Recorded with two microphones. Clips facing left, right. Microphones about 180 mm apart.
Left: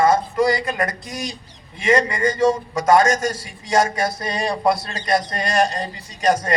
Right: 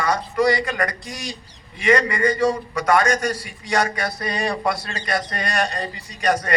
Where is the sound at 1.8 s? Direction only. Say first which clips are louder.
Even; 25° left (ahead or behind).